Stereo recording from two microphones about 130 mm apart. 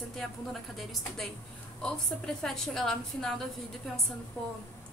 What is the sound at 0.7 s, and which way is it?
A woman's voice, centre (ahead or behind).